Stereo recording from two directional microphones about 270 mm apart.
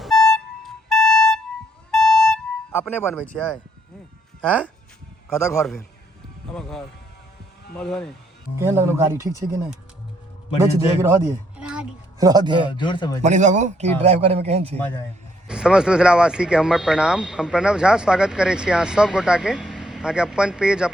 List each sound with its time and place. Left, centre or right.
0.0 s music: centre
1.9 s a sound: centre
4.4 s speech: centre
8.5 s speech: centre
11.0 s a sound: centre
12.3 s speech: centre
12.7 s speech: centre
13.2 s a man's voice: right
15.4 s speech: centre